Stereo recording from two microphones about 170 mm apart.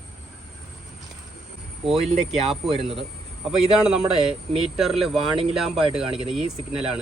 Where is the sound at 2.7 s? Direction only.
35° right (ahead or behind).